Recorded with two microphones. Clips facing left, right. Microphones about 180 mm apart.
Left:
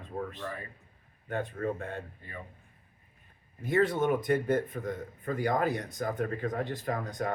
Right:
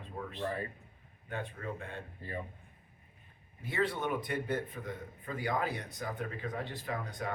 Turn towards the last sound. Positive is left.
turn(degrees=45)  # may be behind; listen again after turning